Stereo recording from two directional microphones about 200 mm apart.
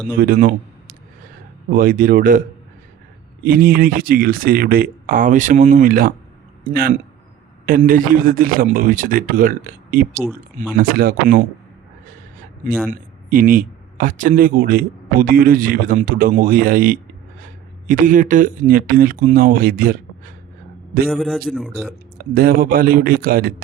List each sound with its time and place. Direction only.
0.2 s speech: 45° right (ahead or behind)
3.4 s speech: 45° right (ahead or behind)
12.9 s speech: 45° right (ahead or behind)
21.1 s a man's voice: centre (ahead or behind)
22.2 s speech: 50° right (ahead or behind)